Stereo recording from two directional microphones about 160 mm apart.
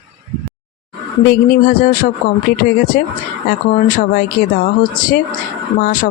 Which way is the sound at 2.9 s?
65° left (ahead or behind).